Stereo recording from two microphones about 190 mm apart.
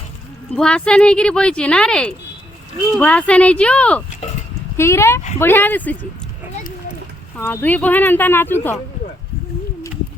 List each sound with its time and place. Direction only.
0.5 s speech: 5° left (ahead or behind)
7.3 s speech: 10° left (ahead or behind)